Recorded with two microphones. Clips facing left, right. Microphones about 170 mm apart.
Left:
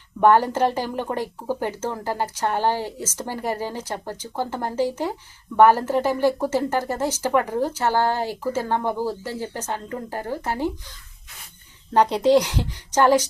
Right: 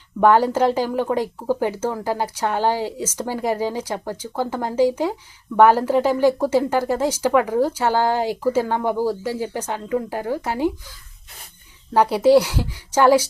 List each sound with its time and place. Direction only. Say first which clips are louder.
0.3 s speech: right 2 dB; 10° right (ahead or behind)
11.9 s speech: right 2 dB; 5° right (ahead or behind)